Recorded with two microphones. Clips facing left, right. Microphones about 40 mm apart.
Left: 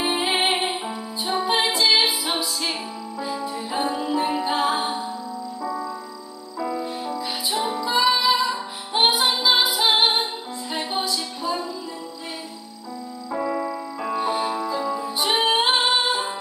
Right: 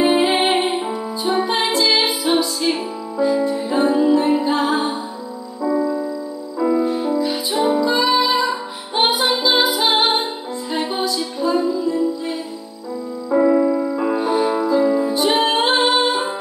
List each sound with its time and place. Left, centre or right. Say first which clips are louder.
0.0 s music: right 7 dB; centre
1.5 s music: left 2 dB; centre
5.6 s music: right 12 dB; centre
13.3 s music: right 11 dB; centre
15.1 s music: right 4 dB; centre